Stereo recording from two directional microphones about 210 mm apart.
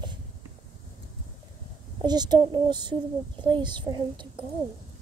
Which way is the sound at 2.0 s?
20° right (ahead or behind).